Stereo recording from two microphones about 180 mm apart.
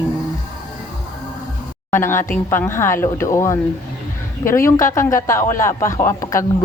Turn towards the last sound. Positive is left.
turn(degrees=15)  # may be behind; listen again after turning